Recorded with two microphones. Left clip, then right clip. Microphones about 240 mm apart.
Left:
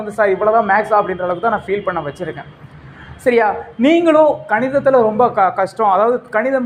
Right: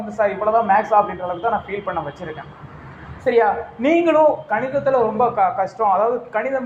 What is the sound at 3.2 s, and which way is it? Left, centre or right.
Speech, left.